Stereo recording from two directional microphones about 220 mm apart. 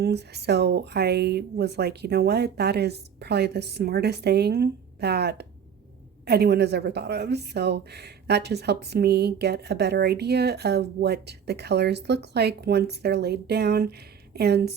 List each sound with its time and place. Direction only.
0.0 s a woman's voice: 50° right (ahead or behind)